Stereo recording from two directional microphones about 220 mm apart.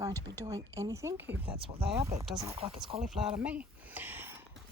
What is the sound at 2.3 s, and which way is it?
Speech, 20° right (ahead or behind).